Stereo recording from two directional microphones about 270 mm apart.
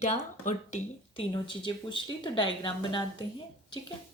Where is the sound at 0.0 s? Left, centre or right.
Left.